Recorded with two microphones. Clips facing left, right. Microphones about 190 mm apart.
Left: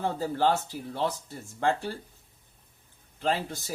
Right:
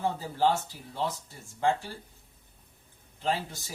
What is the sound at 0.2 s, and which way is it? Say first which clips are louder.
Speech: left 1 dB; 60° left (ahead or behind).